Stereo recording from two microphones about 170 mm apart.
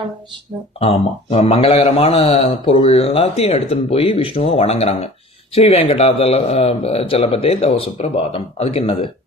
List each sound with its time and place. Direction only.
0.8 s a man's voice: 35° left (ahead or behind)